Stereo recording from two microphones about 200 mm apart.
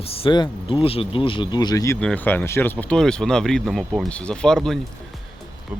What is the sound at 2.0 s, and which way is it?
Speech, 5° left (ahead or behind).